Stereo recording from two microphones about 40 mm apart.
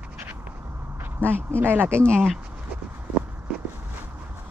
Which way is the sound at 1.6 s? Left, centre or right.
Right.